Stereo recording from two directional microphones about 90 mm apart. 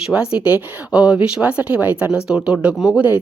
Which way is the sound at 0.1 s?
10° right (ahead or behind).